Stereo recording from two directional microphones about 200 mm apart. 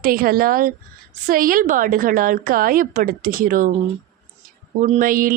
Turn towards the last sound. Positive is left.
turn(degrees=-45)  # may be behind; listen again after turning